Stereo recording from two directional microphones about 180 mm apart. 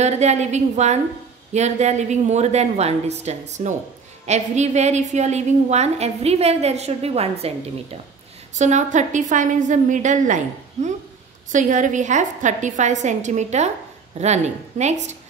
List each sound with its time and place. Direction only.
0.0 s a woman's voice: 40° right (ahead or behind)